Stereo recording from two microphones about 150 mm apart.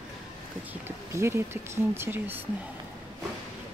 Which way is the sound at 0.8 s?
15° right (ahead or behind).